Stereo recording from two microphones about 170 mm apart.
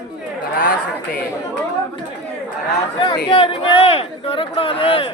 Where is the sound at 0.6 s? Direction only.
55° left (ahead or behind).